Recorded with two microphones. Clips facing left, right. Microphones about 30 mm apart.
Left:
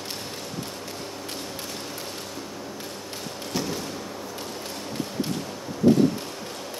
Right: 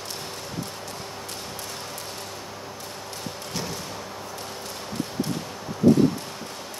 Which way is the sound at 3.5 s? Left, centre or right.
Centre.